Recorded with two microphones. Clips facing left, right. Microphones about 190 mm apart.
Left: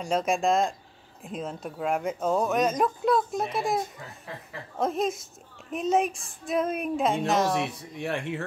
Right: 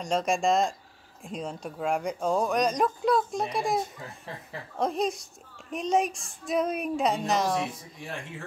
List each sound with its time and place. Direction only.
0.0 s speech: 5° left (ahead or behind)
8.0 s speech: 70° left (ahead or behind)